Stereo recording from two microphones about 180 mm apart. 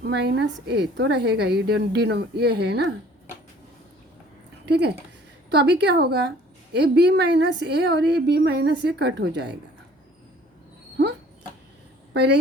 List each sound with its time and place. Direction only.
0.0 s a woman's voice: 65° right (ahead or behind)
4.6 s a woman's voice: 70° right (ahead or behind)
12.1 s a woman's voice: 70° right (ahead or behind)